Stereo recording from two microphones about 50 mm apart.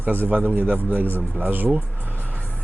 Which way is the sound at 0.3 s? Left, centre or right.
Right.